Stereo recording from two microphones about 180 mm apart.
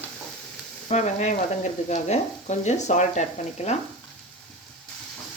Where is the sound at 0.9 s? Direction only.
40° left (ahead or behind).